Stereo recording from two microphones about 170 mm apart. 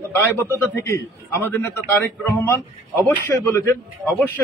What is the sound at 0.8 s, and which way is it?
A man's voice, 15° left (ahead or behind).